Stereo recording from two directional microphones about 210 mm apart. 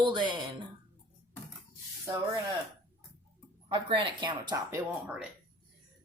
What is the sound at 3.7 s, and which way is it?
Speech, 25° right (ahead or behind).